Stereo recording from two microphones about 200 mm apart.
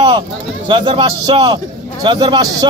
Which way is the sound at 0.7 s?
25° right (ahead or behind).